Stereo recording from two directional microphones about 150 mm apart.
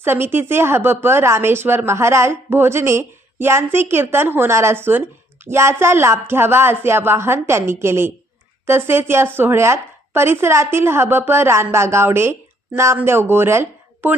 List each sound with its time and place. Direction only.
0.0 s speech: 15° right (ahead or behind)